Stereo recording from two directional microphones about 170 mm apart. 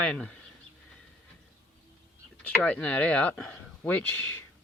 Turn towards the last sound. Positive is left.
turn(degrees=10)  # may be behind; listen again after turning